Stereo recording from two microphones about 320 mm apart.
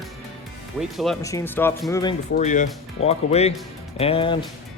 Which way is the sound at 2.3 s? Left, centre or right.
Left.